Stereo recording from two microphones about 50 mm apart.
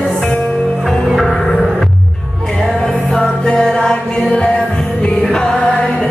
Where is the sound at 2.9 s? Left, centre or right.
Centre.